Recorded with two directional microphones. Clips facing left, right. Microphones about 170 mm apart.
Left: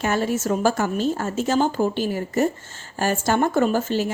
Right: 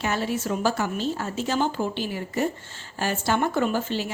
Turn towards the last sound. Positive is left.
turn(degrees=45)  # may be behind; listen again after turning